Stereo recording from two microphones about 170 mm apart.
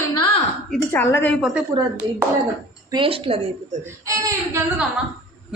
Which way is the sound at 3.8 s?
20° right (ahead or behind).